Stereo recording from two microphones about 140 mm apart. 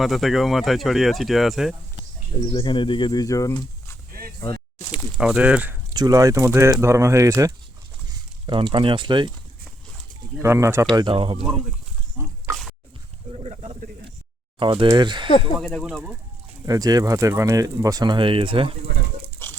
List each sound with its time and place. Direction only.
0.0 s speech: centre (ahead or behind)
2.5 s speech: 35° left (ahead or behind)
4.9 s speech: 5° right (ahead or behind)
5.9 s speech: 25° right (ahead or behind)
8.4 s speech: 35° right (ahead or behind)
10.4 s speech: 20° right (ahead or behind)
10.9 s speech: 40° right (ahead or behind)
13.3 s a sound: 50° right (ahead or behind)
14.6 s speech: 40° right (ahead or behind)
15.6 s speech: centre (ahead or behind)
16.6 s speech: 25° right (ahead or behind)
19.4 s pig: 15° left (ahead or behind)